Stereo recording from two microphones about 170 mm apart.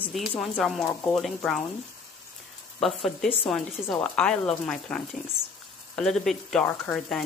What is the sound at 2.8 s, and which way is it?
Speech, centre (ahead or behind).